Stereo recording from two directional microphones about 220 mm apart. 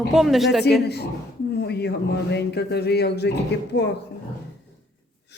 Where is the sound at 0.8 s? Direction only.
50° left (ahead or behind).